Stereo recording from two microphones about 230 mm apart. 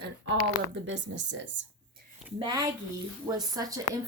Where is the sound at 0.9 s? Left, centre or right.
Right.